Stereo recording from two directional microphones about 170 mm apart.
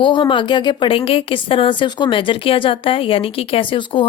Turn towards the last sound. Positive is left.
turn(degrees=30)  # may be behind; listen again after turning